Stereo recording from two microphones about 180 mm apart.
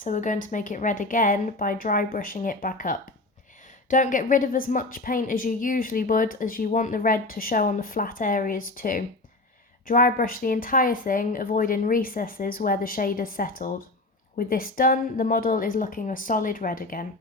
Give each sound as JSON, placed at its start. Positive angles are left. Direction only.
{"t": 0.0, "sound": "a woman's voice", "side_deg": 45}